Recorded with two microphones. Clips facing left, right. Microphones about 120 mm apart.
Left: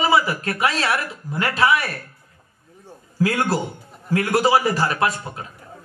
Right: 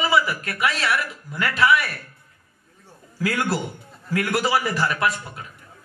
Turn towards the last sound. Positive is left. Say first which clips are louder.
# left 2 dB
turn(degrees=30)  # may be behind; listen again after turning